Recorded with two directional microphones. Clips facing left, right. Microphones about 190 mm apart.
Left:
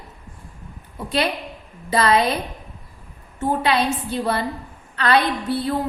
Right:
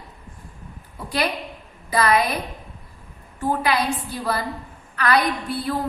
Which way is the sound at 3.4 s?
25° left (ahead or behind).